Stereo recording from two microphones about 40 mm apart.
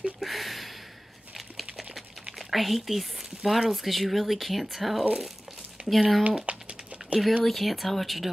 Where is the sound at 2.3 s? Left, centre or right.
Centre.